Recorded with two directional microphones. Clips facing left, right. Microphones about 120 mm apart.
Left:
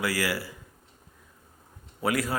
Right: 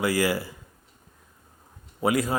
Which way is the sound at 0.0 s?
20° right (ahead or behind).